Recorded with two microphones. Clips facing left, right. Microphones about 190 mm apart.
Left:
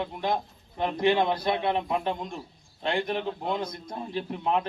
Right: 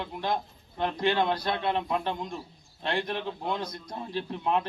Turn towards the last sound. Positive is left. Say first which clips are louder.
# left 1 dB
turn(degrees=10)  # may be behind; listen again after turning